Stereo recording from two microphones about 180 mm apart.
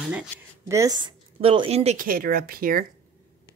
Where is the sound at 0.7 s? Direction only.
20° right (ahead or behind); by 2.8 s 55° right (ahead or behind).